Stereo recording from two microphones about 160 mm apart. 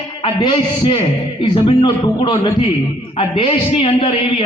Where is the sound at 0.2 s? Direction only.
25° left (ahead or behind).